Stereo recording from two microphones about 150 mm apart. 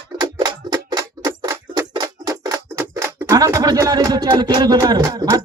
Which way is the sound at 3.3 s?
25° right (ahead or behind).